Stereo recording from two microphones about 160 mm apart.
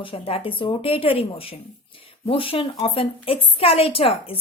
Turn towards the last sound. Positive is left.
turn(degrees=35)  # may be behind; listen again after turning